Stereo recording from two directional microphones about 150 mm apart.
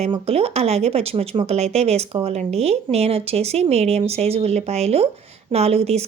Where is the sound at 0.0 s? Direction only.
40° right (ahead or behind).